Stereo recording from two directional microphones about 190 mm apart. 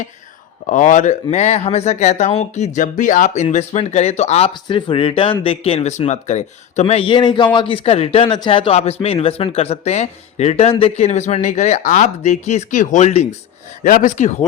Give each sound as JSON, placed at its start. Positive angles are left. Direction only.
{"t": 0.7, "sound": "speech", "side_deg": 40}